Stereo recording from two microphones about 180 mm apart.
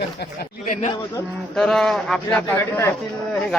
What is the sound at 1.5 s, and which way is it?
A man's voice, 5° left (ahead or behind).